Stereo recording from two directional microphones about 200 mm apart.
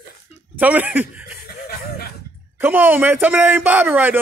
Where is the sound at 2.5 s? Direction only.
10° right (ahead or behind).